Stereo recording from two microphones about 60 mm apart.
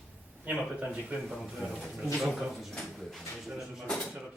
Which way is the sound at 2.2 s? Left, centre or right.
Centre.